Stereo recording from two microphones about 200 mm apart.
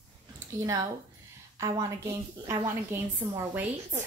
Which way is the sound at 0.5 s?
15° right (ahead or behind).